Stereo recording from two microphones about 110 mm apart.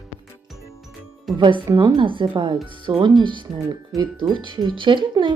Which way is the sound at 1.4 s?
45° right (ahead or behind).